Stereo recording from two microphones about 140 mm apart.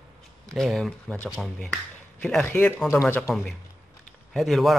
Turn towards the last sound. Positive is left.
turn(degrees=0)  # may be behind; listen again after turning